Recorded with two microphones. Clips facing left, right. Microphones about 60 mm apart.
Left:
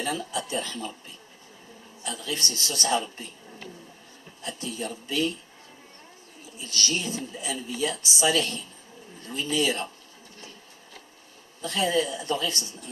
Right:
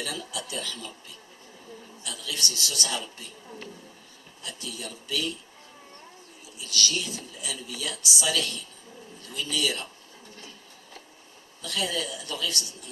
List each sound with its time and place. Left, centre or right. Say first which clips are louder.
0.0 s speech: left 5 dB; left
4.4 s speech: left 5 dB; left
6.6 s speech: even; left
11.6 s speech: left 5 dB; left